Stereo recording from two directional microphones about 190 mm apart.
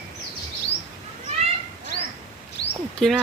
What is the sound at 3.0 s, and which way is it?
Speech, centre (ahead or behind).